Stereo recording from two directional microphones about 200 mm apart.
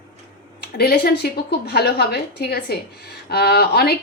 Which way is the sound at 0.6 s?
50° left (ahead or behind).